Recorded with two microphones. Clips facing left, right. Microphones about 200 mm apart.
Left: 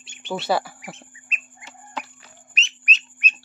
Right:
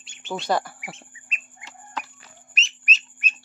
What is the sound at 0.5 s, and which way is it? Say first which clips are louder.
Speech: left 1 dB; 10° left (ahead or behind).